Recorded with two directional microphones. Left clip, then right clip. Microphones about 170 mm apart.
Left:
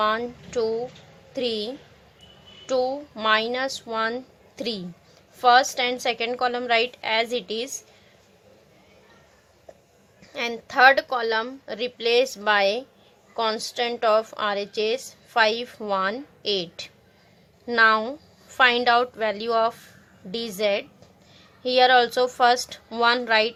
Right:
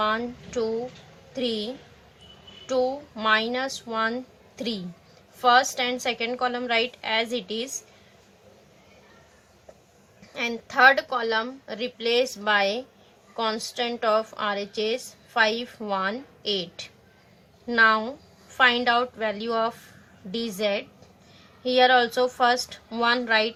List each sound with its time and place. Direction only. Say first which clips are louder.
0.0 s a woman's voice: left 2 dB; 45° left (ahead or behind)
10.3 s a woman's voice: left 2 dB; 50° left (ahead or behind)